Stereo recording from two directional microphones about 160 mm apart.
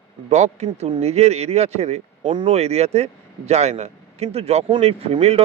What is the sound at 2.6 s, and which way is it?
A man's voice, 40° right (ahead or behind).